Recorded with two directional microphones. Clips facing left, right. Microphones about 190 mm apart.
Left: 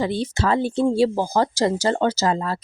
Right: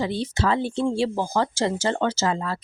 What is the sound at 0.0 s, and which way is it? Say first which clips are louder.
A woman's voice: left 2 dB; 45° left (ahead or behind).